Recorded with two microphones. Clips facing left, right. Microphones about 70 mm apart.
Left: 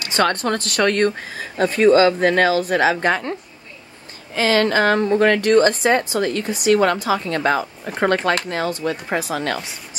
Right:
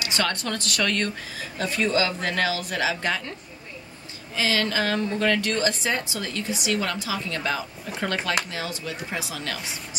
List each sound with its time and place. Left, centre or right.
0.0 s speech: left
4.4 s a woman's voice: left